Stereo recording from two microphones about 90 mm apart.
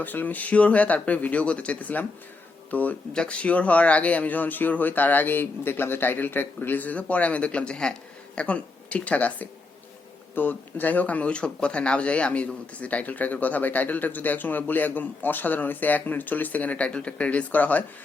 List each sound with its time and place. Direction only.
0.0 s speech: 20° left (ahead or behind)